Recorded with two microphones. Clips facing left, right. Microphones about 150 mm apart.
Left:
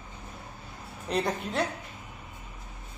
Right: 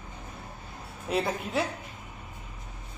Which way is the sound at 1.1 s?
5° right (ahead or behind).